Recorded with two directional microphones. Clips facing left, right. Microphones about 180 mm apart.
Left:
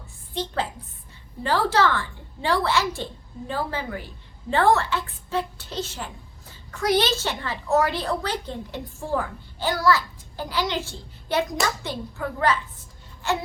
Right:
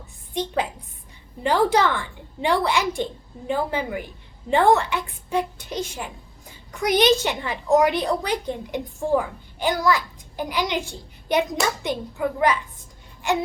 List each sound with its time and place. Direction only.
0.3 s a woman's voice: 15° right (ahead or behind)